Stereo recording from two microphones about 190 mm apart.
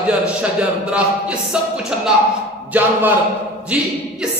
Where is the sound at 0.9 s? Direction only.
5° right (ahead or behind).